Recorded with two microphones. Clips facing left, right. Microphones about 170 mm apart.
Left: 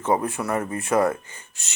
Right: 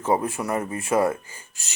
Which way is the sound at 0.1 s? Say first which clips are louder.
Even; 30° right (ahead or behind).